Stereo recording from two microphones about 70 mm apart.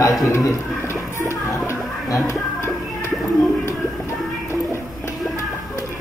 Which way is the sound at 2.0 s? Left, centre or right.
Left.